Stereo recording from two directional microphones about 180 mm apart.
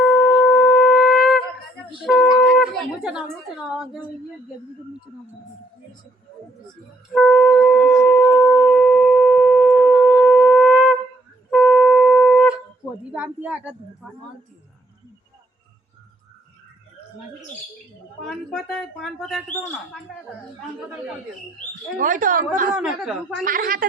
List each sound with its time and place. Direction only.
0.0 s shofar: centre (ahead or behind)
2.0 s a sound: centre (ahead or behind)
7.1 s speech: centre (ahead or behind)
8.4 s shofar: centre (ahead or behind)
11.5 s music: centre (ahead or behind)
13.1 s speech: 5° right (ahead or behind)
18.3 s speech: 5° left (ahead or behind)
21.9 s speech: 45° right (ahead or behind)
22.7 s speech: 5° right (ahead or behind)
23.4 s speech: 50° right (ahead or behind)